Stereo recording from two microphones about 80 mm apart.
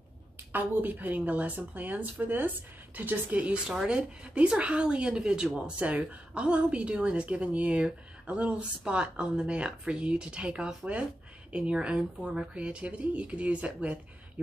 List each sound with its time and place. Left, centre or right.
0.5 s a woman's voice: right